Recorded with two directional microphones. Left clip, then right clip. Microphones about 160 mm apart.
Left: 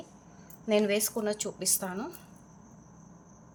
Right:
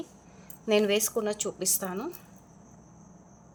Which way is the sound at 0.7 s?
25° right (ahead or behind).